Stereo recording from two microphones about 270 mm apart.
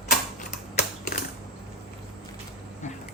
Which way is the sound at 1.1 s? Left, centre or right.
Left.